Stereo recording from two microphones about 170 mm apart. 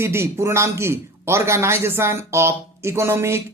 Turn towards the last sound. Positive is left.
turn(degrees=-15)  # may be behind; listen again after turning